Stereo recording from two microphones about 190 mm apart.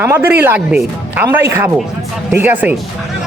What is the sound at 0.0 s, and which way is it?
Speech, 10° right (ahead or behind).